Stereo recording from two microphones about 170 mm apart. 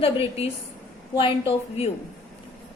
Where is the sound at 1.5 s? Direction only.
35° left (ahead or behind).